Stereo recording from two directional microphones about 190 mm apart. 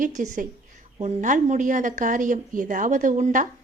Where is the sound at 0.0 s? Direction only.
40° right (ahead or behind).